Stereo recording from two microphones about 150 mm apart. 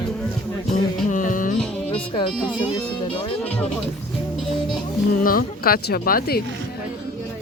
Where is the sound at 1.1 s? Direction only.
60° left (ahead or behind).